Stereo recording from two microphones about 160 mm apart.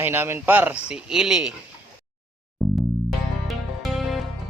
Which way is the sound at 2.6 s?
Centre (ahead or behind).